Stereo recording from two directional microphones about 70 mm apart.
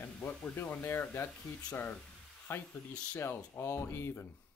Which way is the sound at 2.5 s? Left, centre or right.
Left.